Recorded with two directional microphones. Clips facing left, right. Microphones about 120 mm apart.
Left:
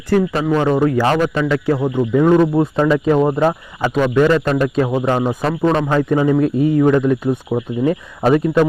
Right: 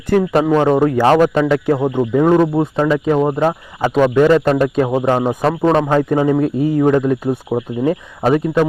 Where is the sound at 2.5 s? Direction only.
10° right (ahead or behind).